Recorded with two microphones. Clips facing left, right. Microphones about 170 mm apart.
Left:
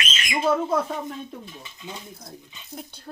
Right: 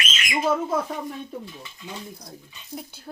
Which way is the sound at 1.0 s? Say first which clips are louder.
Right 1 dB; 20° left (ahead or behind).